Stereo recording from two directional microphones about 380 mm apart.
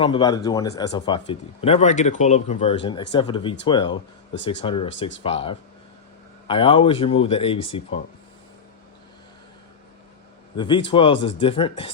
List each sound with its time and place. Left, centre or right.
0.0 s speech: centre
10.6 s speech: centre